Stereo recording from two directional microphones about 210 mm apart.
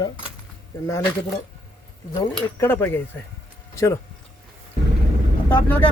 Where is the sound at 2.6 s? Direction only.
10° left (ahead or behind).